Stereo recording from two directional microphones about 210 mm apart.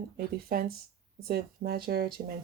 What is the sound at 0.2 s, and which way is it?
Speech, 45° right (ahead or behind).